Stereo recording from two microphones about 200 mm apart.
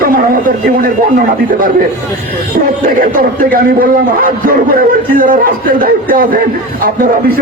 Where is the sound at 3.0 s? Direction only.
45° right (ahead or behind).